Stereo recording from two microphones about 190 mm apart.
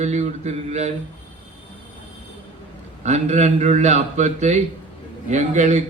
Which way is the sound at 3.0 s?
35° right (ahead or behind).